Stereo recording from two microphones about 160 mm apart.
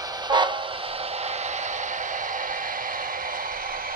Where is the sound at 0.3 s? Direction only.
30° right (ahead or behind); by 3.8 s 60° right (ahead or behind).